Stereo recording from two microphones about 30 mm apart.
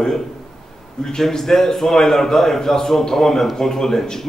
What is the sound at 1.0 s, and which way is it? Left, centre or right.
A man's voice, centre.